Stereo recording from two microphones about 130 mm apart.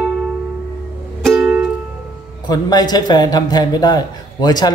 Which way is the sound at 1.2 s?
5° right (ahead or behind).